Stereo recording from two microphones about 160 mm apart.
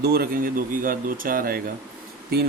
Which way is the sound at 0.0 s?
75° right (ahead or behind).